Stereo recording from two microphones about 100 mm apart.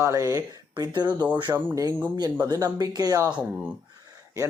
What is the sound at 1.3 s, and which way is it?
Music, 50° right (ahead or behind).